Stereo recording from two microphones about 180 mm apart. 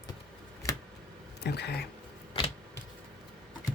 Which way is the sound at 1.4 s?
65° left (ahead or behind).